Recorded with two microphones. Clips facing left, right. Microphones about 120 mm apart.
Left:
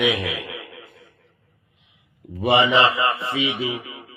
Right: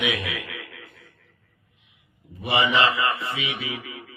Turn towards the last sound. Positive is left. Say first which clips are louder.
# left 6 dB
turn(degrees=25)  # may be behind; listen again after turning